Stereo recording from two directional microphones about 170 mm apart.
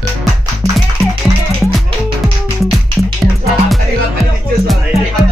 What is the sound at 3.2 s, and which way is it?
Music, centre (ahead or behind).